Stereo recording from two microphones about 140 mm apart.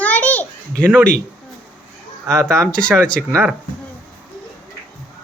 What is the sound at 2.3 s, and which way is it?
Speech, 20° right (ahead or behind).